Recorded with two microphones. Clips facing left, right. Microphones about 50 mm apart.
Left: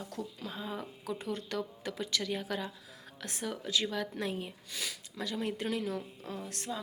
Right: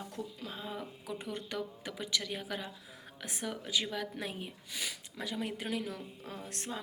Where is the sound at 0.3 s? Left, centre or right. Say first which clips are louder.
Left 2 dB; centre.